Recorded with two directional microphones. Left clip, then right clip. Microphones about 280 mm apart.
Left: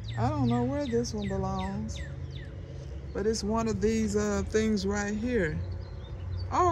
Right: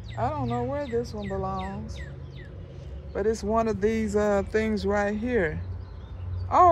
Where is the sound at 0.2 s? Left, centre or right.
Centre.